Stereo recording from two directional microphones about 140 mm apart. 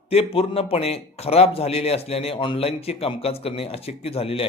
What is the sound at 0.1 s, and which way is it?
A man's voice, 45° left (ahead or behind).